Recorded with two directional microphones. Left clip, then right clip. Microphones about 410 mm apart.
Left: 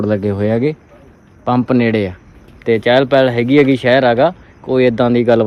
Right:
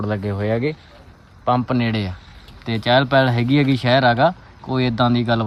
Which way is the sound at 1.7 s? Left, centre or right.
Centre.